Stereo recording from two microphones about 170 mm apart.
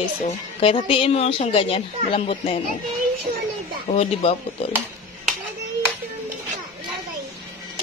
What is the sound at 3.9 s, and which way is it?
Speech, 35° left (ahead or behind).